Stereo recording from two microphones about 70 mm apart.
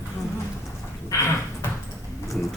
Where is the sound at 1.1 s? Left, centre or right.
Left.